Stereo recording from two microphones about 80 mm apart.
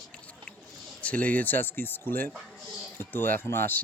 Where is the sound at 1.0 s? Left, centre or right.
Centre.